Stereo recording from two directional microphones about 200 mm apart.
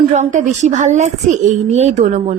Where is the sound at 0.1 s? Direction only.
35° right (ahead or behind).